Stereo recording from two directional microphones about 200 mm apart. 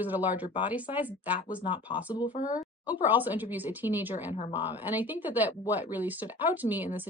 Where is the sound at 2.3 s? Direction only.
40° left (ahead or behind).